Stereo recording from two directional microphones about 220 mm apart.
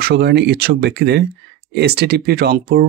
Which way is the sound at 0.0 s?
50° right (ahead or behind).